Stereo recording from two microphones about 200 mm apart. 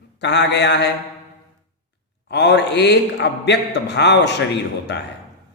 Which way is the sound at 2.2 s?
55° left (ahead or behind).